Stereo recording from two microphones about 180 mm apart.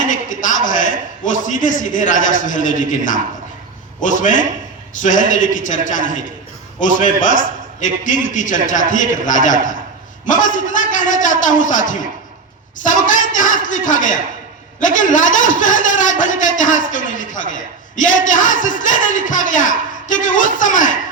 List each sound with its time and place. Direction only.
0.0 s a man's voice: 45° left (ahead or behind)